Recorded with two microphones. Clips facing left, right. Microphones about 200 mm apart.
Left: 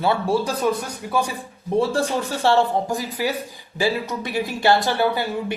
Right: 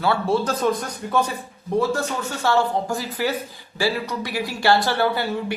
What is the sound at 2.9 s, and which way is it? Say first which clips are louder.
Speech: even; 15° left (ahead or behind).